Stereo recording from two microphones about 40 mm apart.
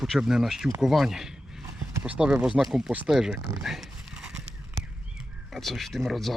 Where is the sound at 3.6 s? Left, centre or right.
Centre.